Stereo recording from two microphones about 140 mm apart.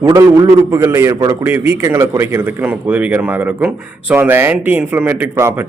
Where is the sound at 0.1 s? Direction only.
20° right (ahead or behind).